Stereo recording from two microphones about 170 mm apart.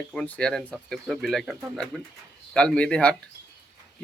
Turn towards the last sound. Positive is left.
turn(degrees=5)  # may be behind; listen again after turning